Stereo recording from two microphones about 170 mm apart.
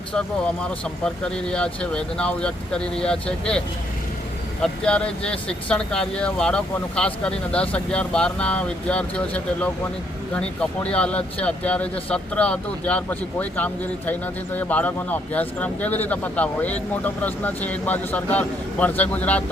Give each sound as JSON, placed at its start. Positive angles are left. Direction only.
{"t": 0.1, "sound": "speech", "side_deg": 5}
{"t": 4.6, "sound": "speech", "side_deg": 5}